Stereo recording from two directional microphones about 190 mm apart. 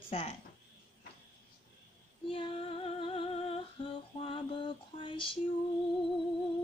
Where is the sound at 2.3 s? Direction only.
30° left (ahead or behind).